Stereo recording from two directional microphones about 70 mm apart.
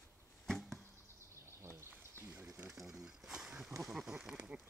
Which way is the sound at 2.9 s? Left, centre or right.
Centre.